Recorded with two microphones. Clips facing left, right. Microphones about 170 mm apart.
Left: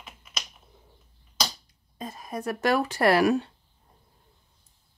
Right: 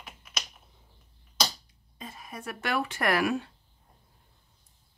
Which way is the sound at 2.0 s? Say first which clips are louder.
Left 8 dB; 40° left (ahead or behind).